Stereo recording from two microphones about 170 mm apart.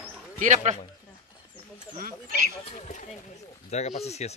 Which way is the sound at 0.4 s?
45° right (ahead or behind).